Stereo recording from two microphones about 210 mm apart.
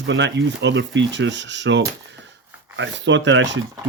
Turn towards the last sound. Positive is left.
turn(degrees=-60)  # may be behind; listen again after turning